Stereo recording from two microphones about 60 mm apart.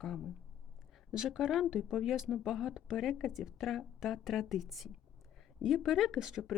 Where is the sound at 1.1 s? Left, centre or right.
Centre.